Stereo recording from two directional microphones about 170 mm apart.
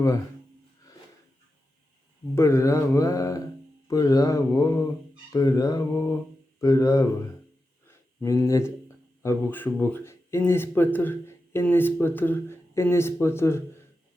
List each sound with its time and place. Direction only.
2.3 s speech: 15° left (ahead or behind)
3.8 s mantra: 20° left (ahead or behind)
7.9 s a sound: 15° left (ahead or behind)
9.2 s speech: 15° left (ahead or behind)